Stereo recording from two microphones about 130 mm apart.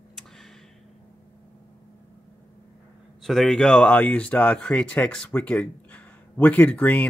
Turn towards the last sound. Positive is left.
turn(degrees=10)  # may be behind; listen again after turning